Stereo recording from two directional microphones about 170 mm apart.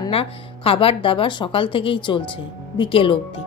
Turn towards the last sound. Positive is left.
turn(degrees=30)  # may be behind; listen again after turning